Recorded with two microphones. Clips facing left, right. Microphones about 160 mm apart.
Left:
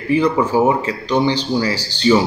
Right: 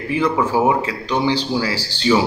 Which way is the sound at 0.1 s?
5° right (ahead or behind).